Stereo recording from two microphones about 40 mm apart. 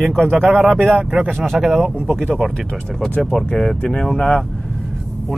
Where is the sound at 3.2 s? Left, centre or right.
Centre.